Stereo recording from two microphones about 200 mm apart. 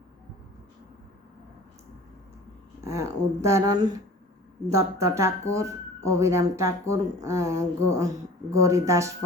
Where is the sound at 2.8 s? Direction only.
15° right (ahead or behind).